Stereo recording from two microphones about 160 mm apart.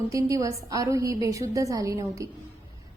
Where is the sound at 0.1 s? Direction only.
20° right (ahead or behind).